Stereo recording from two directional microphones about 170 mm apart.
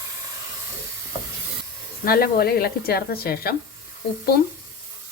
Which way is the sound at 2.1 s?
65° left (ahead or behind).